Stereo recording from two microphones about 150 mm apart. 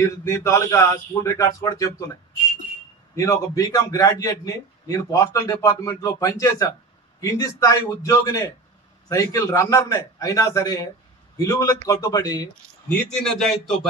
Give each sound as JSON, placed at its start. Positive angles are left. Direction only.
{"t": 0.0, "sound": "a man's voice", "side_deg": 20}
{"t": 3.2, "sound": "a man's voice", "side_deg": 25}
{"t": 12.8, "sound": "a man's voice", "side_deg": 5}